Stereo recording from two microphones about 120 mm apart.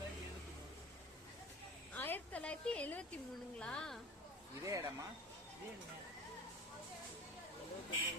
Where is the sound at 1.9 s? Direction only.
15° left (ahead or behind).